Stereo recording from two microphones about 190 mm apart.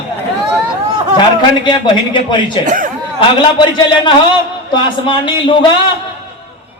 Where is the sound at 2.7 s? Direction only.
45° right (ahead or behind).